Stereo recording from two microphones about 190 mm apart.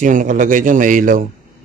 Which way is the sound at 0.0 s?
45° right (ahead or behind).